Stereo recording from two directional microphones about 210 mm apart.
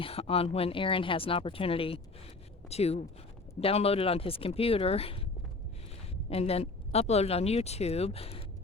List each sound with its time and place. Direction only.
0.0 s speech: 25° left (ahead or behind)
6.2 s speech: 30° left (ahead or behind)